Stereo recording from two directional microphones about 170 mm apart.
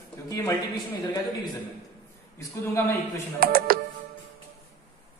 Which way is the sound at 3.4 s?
60° right (ahead or behind).